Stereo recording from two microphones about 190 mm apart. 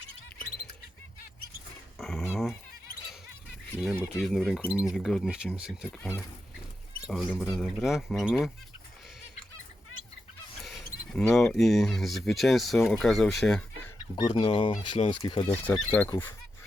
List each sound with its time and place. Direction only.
2.0 s dog: centre (ahead or behind)
3.9 s speech: 5° right (ahead or behind)
7.0 s speech: centre (ahead or behind)
10.6 s a sound: centre (ahead or behind)
11.3 s speech: centre (ahead or behind)
14.2 s speech: 25° left (ahead or behind)
15.2 s speech: 20° left (ahead or behind)
15.5 s speech: 10° left (ahead or behind)